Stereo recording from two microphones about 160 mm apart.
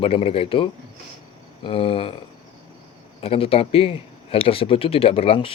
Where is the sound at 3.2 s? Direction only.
35° left (ahead or behind).